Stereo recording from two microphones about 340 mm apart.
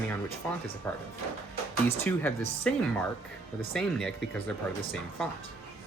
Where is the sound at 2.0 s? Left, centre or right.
Centre.